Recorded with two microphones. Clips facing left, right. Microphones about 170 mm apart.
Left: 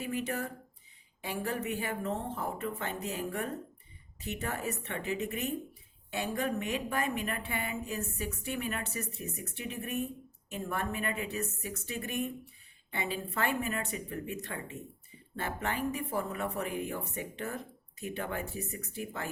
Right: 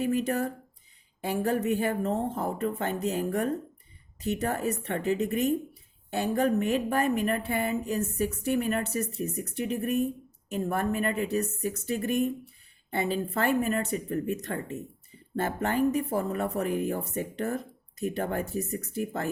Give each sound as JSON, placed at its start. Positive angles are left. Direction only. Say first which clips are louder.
{"t": 0.0, "sound": "a woman's voice", "louder": "right 8 dB", "side_deg": -45}